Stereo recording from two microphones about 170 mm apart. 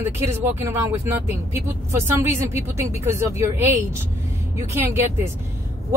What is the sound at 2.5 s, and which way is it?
Speech, 15° right (ahead or behind).